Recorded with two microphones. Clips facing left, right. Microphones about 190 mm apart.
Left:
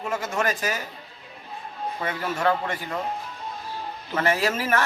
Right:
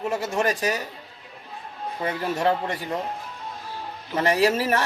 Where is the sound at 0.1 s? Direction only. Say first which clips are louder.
Right 1 dB; 30° right (ahead or behind).